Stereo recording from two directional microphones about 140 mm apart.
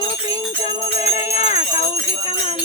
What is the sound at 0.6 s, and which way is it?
Jingle bell, 50° left (ahead or behind).